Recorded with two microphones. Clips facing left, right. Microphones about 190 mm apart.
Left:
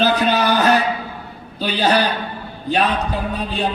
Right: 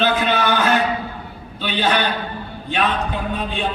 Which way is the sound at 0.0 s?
40° left (ahead or behind).